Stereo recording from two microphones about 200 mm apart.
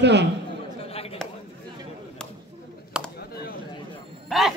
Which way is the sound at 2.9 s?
5° right (ahead or behind).